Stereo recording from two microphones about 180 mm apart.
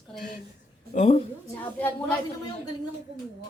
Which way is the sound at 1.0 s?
35° left (ahead or behind).